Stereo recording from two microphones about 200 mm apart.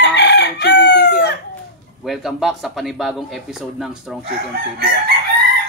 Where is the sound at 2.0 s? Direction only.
Centre (ahead or behind).